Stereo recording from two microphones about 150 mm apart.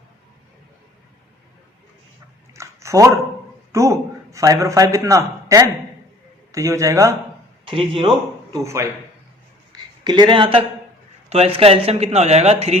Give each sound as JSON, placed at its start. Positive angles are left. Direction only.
{"t": 2.6, "sound": "a sound", "side_deg": -20}
{"t": 3.7, "sound": "a man's voice", "side_deg": -20}
{"t": 7.6, "sound": "a man's voice", "side_deg": -35}
{"t": 8.6, "sound": "a man's voice", "side_deg": -20}
{"t": 9.7, "sound": "speech", "side_deg": -30}